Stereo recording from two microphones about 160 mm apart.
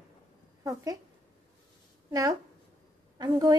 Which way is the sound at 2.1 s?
20° right (ahead or behind).